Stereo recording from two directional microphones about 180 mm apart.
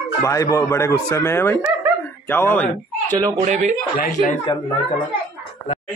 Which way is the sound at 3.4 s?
40° right (ahead or behind).